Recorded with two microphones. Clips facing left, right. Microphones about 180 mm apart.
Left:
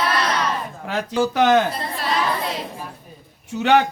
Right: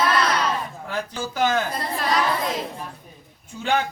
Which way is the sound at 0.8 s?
80° left.